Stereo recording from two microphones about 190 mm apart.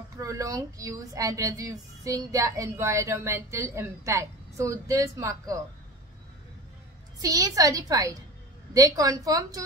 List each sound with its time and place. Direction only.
0.2 s a woman's voice: 15° right (ahead or behind)
7.2 s a woman's voice: 20° right (ahead or behind)